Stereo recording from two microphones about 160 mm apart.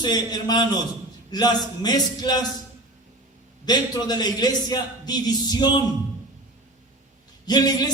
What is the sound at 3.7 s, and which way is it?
A man's voice, 25° left (ahead or behind).